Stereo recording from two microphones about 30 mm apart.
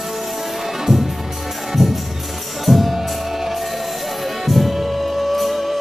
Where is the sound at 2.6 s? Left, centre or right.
Centre.